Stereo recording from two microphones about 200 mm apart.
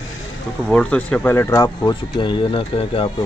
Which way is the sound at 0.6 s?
5° left (ahead or behind).